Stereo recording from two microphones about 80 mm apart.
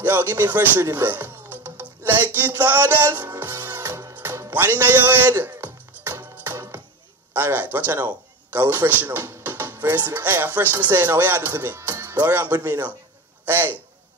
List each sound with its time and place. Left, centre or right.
0.0 s speech: right
0.8 s music: right
7.3 s speech: right